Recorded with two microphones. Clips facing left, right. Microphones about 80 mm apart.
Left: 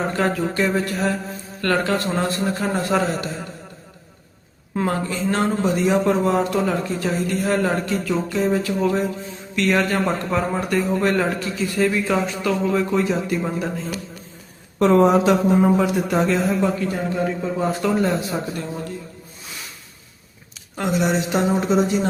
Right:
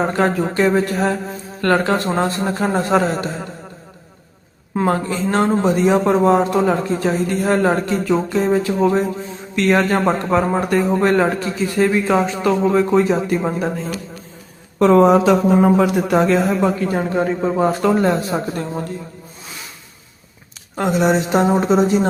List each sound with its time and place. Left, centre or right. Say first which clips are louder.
0.3 s a man's voice: right 5 dB; right
4.9 s a man's voice: right 4 dB; right
15.2 s a man's voice: right 3 dB; right
20.7 s a man's voice: right 4 dB; right